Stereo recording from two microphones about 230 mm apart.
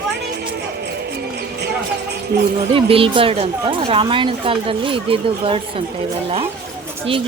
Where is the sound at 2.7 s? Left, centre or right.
Right.